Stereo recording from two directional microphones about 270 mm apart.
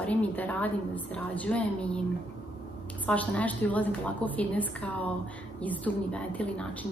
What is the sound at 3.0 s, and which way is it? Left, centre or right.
Speech, centre.